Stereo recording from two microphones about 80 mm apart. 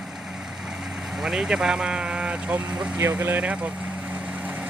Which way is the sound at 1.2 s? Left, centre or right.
Centre.